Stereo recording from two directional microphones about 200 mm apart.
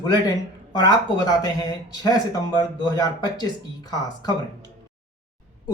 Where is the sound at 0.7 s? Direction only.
20° left (ahead or behind).